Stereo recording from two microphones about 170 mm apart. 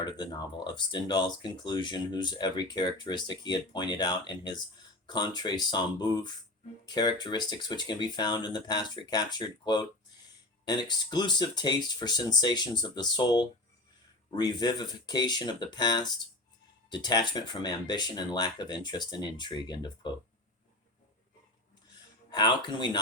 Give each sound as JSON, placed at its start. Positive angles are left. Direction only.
{"t": 0.0, "sound": "speech", "side_deg": 25}
{"t": 22.3, "sound": "speech", "side_deg": 25}